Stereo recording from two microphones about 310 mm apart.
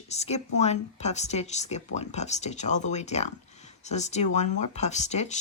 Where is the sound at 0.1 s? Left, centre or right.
Left.